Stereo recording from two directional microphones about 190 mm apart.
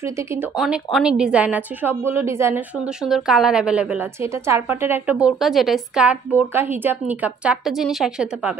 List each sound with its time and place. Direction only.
0.0 s a woman's voice: 15° right (ahead or behind)
0.9 s a woman's voice: 5° right (ahead or behind)